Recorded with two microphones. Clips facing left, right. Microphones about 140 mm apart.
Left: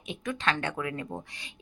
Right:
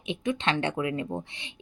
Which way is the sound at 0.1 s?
25° right (ahead or behind).